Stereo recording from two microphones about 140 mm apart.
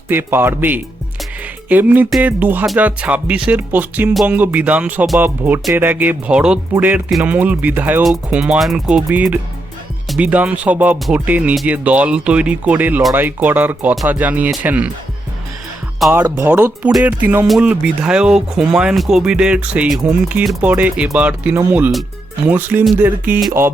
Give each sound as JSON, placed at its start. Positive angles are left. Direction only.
{"t": 0.1, "sound": "speech", "side_deg": -15}
{"t": 4.1, "sound": "speech", "side_deg": 0}
{"t": 16.0, "sound": "speech", "side_deg": -20}